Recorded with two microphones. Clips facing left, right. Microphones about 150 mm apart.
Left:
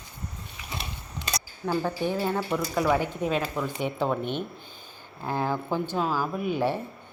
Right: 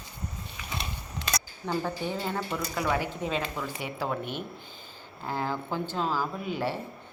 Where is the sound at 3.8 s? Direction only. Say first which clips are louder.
Left 6 dB; 20° left (ahead or behind).